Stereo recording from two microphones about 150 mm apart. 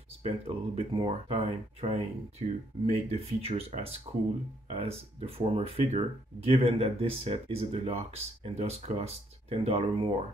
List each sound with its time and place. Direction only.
0.2 s speech: 40° right (ahead or behind)